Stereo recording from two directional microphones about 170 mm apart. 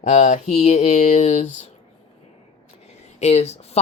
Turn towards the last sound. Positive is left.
turn(degrees=40)  # may be behind; listen again after turning